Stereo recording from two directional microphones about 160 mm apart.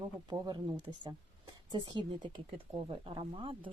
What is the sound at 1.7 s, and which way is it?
Speech, 30° right (ahead or behind).